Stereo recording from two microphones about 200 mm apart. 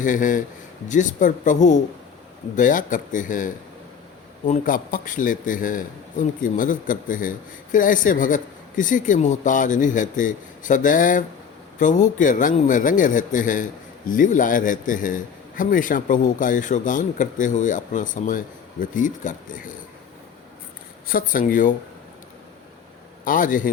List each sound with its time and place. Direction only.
0.0 s a man's voice: 40° left (ahead or behind)
21.1 s speech: 45° left (ahead or behind)
23.2 s speech: 45° left (ahead or behind)